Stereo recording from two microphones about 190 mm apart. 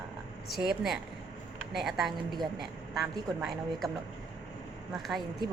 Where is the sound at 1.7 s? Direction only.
Centre (ahead or behind).